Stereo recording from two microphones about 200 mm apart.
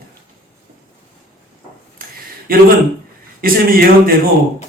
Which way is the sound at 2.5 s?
45° right (ahead or behind).